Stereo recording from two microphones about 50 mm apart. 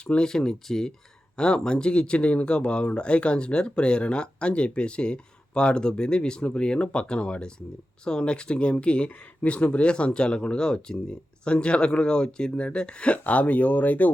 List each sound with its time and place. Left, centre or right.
0.0 s speech: left
0.3 s speech: centre; by 14.1 s left